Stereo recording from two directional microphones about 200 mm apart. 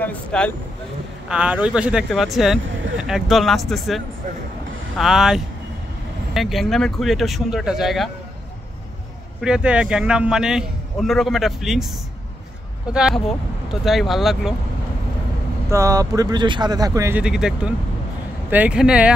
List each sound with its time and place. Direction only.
0.0 s speech: 5° left (ahead or behind)
1.3 s speech: 5° right (ahead or behind)
9.4 s speech: 5° right (ahead or behind)
12.9 s speech: 5° right (ahead or behind)
15.7 s speech: 15° right (ahead or behind)
17.2 s speech: 5° right (ahead or behind)